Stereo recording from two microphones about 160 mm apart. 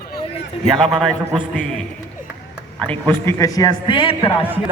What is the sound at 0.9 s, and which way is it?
Speech, centre (ahead or behind).